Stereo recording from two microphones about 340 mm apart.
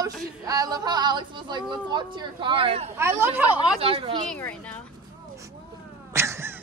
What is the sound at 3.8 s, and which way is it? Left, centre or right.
Speech, centre.